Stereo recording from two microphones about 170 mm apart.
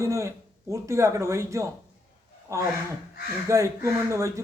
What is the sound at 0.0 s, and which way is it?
Speech, 15° right (ahead or behind).